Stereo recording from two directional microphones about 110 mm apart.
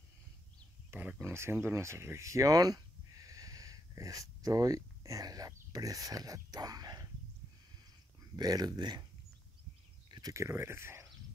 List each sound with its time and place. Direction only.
0.9 s speech: 15° right (ahead or behind); by 7.1 s 35° right (ahead or behind)
8.4 s speech: 35° right (ahead or behind)
10.0 s a sound: 45° right (ahead or behind)
10.3 s speech: 25° right (ahead or behind)